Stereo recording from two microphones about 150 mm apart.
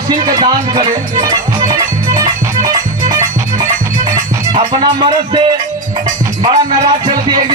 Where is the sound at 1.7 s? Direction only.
25° right (ahead or behind).